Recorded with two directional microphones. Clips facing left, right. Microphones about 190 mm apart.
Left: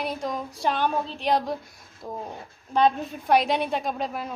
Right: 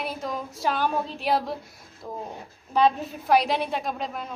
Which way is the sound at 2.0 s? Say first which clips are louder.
Left 1 dB; 10° left (ahead or behind).